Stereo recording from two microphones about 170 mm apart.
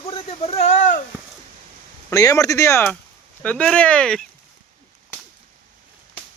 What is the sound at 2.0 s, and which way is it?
Speech, 20° left (ahead or behind).